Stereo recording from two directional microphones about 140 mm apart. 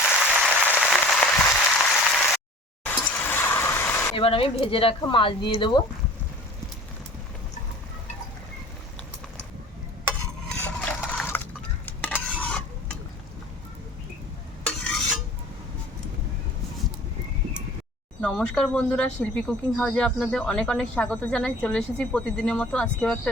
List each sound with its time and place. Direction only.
0.2 s applause: 5° right (ahead or behind)
0.8 s a sound: 5° left (ahead or behind)
4.1 s speech: 40° left (ahead or behind)
10.5 s a sound: 5° left (ahead or behind)
11.9 s stir: 10° left (ahead or behind)
18.2 s speech: 5° left (ahead or behind)